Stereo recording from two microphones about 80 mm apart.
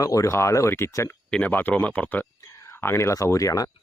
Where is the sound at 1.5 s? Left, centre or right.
Left.